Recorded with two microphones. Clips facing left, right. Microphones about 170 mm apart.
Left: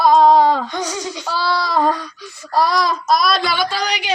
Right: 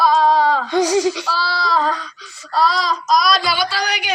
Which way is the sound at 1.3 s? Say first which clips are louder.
Left 1 dB; 55° left (ahead or behind).